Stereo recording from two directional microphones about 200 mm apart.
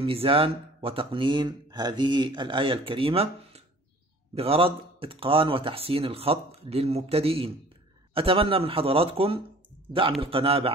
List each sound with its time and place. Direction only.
0.0 s speech: 25° right (ahead or behind)